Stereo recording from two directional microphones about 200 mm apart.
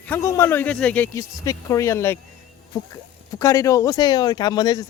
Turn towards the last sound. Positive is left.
turn(degrees=20)  # may be behind; listen again after turning